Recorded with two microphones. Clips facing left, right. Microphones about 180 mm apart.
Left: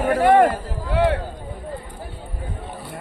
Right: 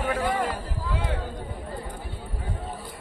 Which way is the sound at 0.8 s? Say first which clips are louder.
Left 12 dB; 70° left (ahead or behind).